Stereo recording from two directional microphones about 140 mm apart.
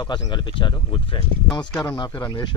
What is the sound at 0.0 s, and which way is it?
Speech, 35° left (ahead or behind).